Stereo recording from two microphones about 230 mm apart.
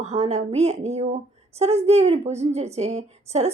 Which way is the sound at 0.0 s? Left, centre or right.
Right.